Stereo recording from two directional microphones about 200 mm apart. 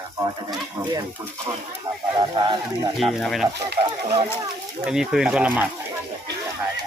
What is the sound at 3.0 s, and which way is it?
Speech, centre (ahead or behind).